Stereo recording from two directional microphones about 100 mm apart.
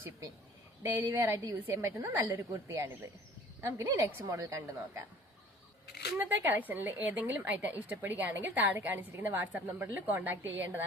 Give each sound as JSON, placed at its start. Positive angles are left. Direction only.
{"t": 0.8, "sound": "a woman's voice", "side_deg": -25}
{"t": 6.1, "sound": "a woman's voice", "side_deg": -20}